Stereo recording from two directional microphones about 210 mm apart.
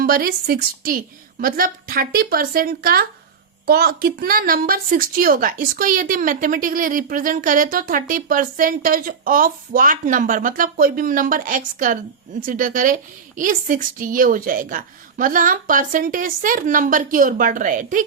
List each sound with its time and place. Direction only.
0.0 s a woman's voice: 45° right (ahead or behind)